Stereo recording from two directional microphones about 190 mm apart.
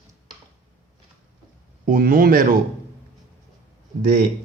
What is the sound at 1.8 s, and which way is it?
Speech, 50° right (ahead or behind).